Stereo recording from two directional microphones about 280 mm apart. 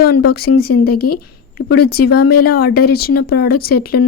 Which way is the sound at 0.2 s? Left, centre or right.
Left.